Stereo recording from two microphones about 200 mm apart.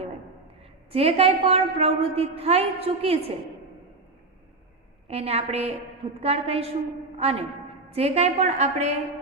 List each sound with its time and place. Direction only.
0.9 s a woman's voice: 30° right (ahead or behind)
5.0 s a woman's voice: 30° right (ahead or behind)